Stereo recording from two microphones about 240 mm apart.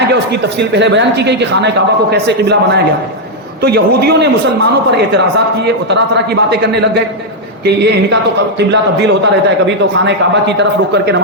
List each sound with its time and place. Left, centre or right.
0.7 s a man's voice: right